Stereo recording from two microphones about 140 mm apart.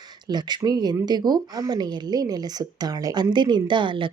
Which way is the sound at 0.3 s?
30° right (ahead or behind).